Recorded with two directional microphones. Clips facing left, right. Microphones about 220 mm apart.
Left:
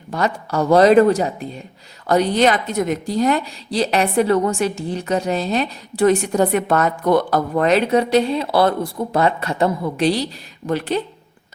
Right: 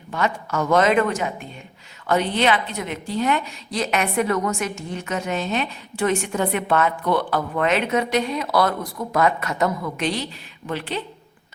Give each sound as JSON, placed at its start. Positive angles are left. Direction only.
{"t": 0.1, "sound": "a woman's voice", "side_deg": 35}